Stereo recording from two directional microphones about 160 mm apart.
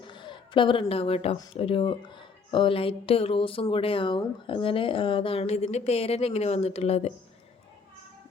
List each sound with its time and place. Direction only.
0.0 s a woman's voice: 30° left (ahead or behind)